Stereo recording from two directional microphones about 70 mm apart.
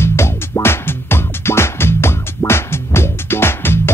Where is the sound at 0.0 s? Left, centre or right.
Left.